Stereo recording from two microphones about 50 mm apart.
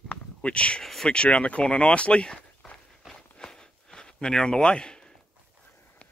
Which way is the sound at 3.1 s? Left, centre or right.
Centre.